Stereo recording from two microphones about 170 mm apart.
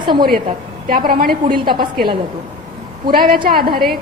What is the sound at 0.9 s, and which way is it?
Speech, 55° right (ahead or behind).